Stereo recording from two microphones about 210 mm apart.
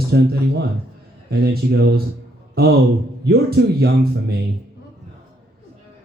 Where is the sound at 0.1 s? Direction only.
50° right (ahead or behind).